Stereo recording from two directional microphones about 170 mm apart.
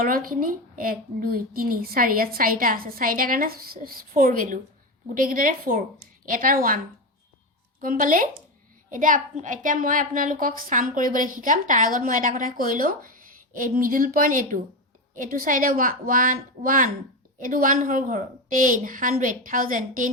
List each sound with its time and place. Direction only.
0.0 s a woman's voice: 55° right (ahead or behind)
7.8 s a woman's voice: 55° right (ahead or behind)